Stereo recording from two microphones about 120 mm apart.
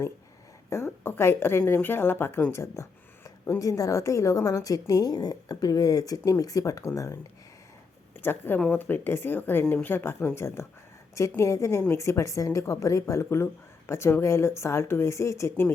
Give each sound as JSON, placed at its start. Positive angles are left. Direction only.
{"t": 0.7, "sound": "a woman's voice", "side_deg": 20}
{"t": 8.2, "sound": "a woman's voice", "side_deg": 15}